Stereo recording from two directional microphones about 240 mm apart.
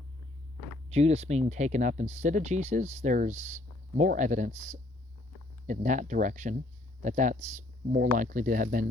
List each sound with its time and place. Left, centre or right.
0.9 s speech: right